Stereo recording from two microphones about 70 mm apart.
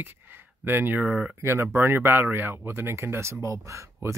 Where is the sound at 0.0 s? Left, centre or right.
Right.